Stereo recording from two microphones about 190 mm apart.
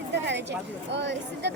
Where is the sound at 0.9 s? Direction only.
70° right (ahead or behind).